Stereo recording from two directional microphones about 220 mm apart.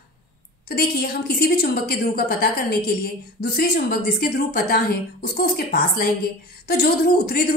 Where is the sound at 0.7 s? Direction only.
45° left (ahead or behind).